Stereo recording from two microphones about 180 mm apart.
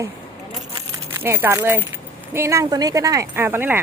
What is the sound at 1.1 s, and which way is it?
A woman's voice, 15° right (ahead or behind).